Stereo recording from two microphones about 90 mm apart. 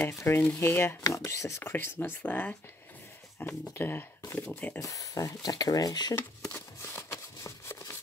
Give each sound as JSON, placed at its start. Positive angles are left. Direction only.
{"t": 0.0, "sound": "speech", "side_deg": 30}
{"t": 4.7, "sound": "speech", "side_deg": 40}
{"t": 6.5, "sound": "a sound", "side_deg": 30}